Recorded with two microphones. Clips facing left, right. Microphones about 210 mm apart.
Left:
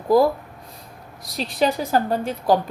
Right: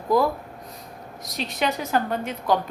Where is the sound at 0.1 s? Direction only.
30° left (ahead or behind).